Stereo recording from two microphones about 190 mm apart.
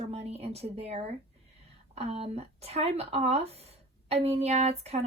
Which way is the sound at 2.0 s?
30° right (ahead or behind).